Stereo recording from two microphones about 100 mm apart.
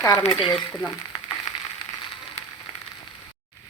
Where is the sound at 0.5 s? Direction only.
10° left (ahead or behind).